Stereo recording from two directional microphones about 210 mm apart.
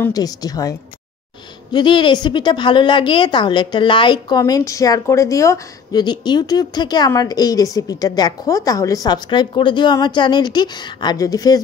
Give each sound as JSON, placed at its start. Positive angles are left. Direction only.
{"t": 0.0, "sound": "a woman's voice", "side_deg": 15}